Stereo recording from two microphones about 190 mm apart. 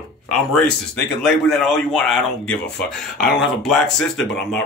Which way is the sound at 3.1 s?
50° left (ahead or behind).